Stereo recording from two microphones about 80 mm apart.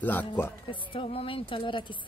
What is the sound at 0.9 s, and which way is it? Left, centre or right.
Speech, left.